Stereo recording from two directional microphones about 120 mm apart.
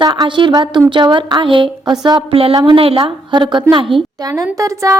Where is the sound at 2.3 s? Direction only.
50° right (ahead or behind).